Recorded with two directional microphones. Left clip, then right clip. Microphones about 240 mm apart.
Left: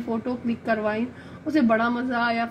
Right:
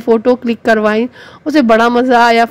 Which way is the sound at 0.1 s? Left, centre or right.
Right.